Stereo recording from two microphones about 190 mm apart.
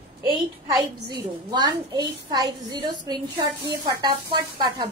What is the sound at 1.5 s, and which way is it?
A woman's voice, 20° right (ahead or behind).